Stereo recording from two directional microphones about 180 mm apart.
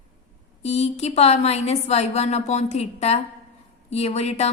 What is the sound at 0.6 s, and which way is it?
A woman's voice, 35° left (ahead or behind).